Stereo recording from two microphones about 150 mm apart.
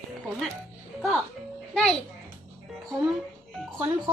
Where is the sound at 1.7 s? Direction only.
5° left (ahead or behind).